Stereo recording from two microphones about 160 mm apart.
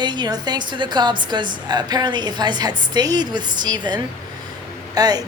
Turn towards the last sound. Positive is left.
turn(degrees=-25)  # may be behind; listen again after turning